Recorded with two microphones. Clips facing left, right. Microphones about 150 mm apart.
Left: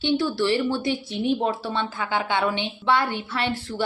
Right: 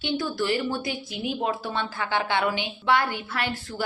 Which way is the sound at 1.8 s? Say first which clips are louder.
Left 1 dB; 15° left (ahead or behind).